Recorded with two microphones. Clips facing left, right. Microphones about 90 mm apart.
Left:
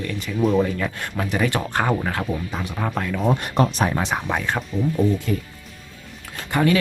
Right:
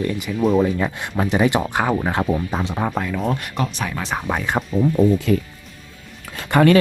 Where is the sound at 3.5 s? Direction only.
35° left (ahead or behind).